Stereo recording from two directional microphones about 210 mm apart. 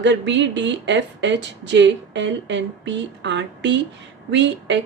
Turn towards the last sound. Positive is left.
turn(degrees=-55)  # may be behind; listen again after turning